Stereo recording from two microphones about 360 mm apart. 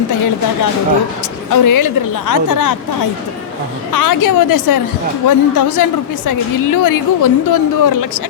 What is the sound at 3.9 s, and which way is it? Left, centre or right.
A woman's voice, left.